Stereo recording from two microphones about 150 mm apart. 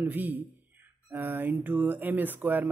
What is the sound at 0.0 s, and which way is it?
Speech, 10° right (ahead or behind).